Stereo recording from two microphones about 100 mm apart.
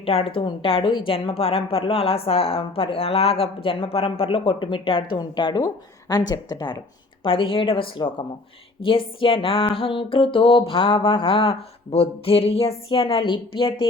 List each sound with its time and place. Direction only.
0.0 s a woman's voice: 80° left; by 5.2 s 60° left (ahead or behind)
5.2 s speech: 45° left (ahead or behind)
7.3 s music: 60° left (ahead or behind)